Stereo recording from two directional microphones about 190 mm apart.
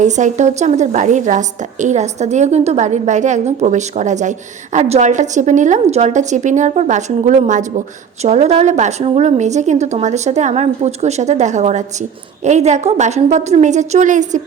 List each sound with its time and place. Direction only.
0.0 s a woman's voice: 40° right (ahead or behind)